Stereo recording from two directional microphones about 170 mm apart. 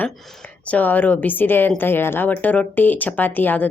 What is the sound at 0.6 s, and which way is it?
Speech, 10° left (ahead or behind).